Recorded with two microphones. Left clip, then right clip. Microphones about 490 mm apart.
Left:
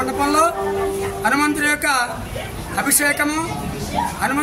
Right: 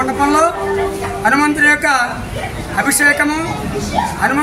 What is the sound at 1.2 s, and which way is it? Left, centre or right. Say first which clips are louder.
A woman's voice: right 6 dB; left.